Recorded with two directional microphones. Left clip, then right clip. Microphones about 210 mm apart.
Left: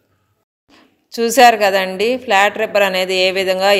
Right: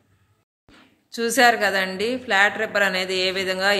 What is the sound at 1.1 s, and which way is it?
A woman's voice, 25° left (ahead or behind).